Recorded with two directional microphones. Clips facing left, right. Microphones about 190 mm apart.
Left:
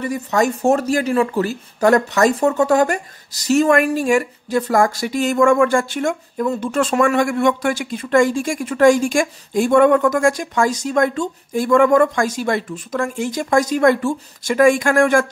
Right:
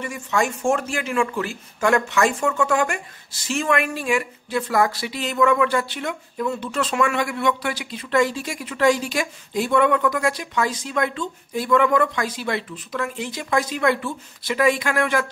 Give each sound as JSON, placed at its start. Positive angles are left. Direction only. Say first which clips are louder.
{"t": 0.0, "sound": "speech", "louder": "left 5 dB", "side_deg": 40}